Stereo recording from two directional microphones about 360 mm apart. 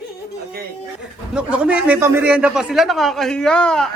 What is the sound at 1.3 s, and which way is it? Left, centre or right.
A man's voice, centre.